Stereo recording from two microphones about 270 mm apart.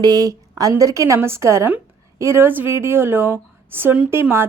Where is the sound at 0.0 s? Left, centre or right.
Centre.